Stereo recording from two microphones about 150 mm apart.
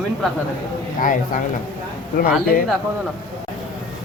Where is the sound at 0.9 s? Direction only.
60° left (ahead or behind).